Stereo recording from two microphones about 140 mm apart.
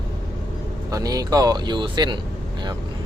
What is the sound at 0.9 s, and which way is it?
Speech, 25° right (ahead or behind).